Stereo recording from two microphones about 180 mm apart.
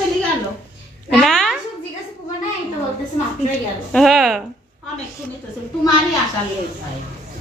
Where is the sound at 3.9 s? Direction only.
Centre (ahead or behind).